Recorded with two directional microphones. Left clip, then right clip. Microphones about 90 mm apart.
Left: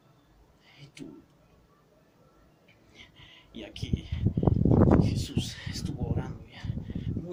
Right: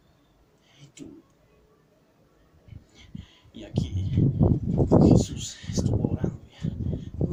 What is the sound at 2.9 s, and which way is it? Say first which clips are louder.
Whispering: even; 25° left (ahead or behind).